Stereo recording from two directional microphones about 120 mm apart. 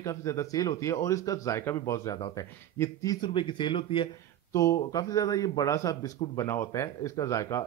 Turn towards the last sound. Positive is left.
turn(degrees=25)  # may be behind; listen again after turning